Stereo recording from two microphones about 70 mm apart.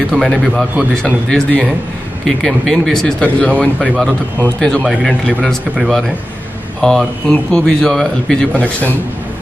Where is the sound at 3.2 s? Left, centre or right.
Centre.